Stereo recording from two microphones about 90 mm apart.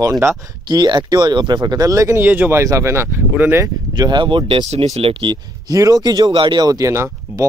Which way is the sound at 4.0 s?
55° right (ahead or behind).